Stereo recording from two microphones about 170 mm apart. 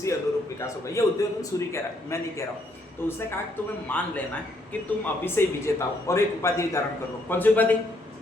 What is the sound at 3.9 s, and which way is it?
A man's voice, 10° left (ahead or behind).